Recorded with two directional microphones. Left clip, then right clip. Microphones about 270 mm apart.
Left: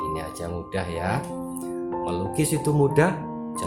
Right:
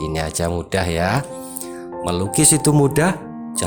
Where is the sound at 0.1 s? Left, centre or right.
Right.